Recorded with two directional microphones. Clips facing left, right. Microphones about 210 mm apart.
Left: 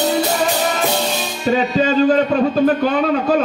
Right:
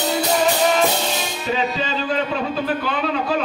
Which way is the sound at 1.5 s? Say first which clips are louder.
Left 7 dB; 45° left (ahead or behind).